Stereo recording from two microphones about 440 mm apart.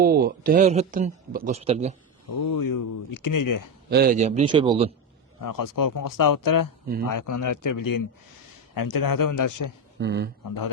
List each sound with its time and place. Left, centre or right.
0.0 s a man's voice: centre
2.4 s speech: left
3.8 s a man's voice: right
5.4 s speech: left
10.0 s speech: right